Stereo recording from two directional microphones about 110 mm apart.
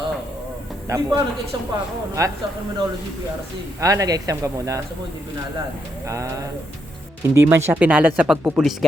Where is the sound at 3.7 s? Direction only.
30° right (ahead or behind).